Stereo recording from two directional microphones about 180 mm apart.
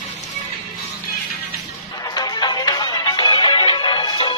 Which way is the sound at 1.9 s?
20° left (ahead or behind).